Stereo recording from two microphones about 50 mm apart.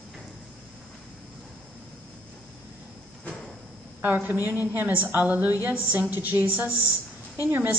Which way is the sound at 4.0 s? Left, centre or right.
Right.